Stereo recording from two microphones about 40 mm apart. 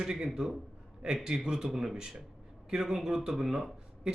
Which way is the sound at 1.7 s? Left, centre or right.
Centre.